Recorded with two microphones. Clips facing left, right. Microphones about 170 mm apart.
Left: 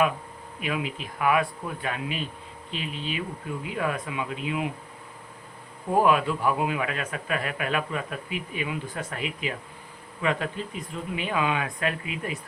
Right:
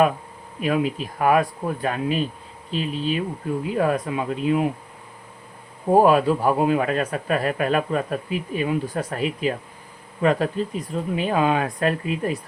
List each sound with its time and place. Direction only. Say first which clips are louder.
0.6 s speech: right 8 dB; 40° right (ahead or behind)
5.9 s speech: right 6 dB; 35° right (ahead or behind)